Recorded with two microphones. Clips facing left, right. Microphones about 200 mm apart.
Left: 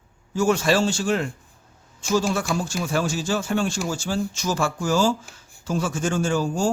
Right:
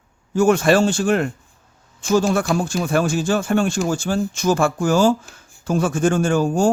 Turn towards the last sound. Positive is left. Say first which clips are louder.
# right 5 dB
turn(degrees=-55)  # may be behind; listen again after turning